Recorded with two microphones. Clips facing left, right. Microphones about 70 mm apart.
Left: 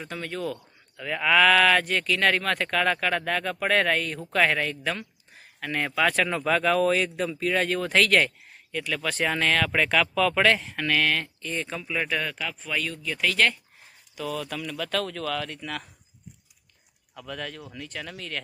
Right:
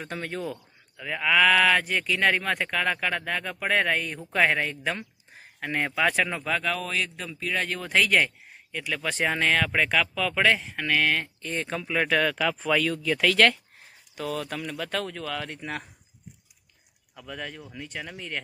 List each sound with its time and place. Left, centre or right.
0.0 s speech: right
0.9 s speech: centre
6.4 s speech: centre; by 11.2 s right
11.4 s speech: right
11.8 s speech: right
14.1 s speech: right
17.1 s speech: centre